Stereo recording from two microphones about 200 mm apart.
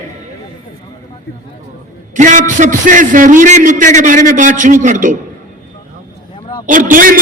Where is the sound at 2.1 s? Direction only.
40° right (ahead or behind).